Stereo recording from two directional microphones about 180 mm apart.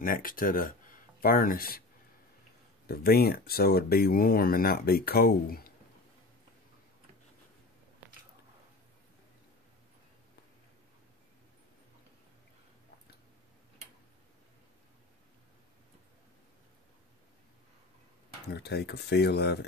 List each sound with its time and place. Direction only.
0.0 s speech: 50° left (ahead or behind)
2.9 s speech: 60° left (ahead or behind)
18.5 s speech: 65° left (ahead or behind)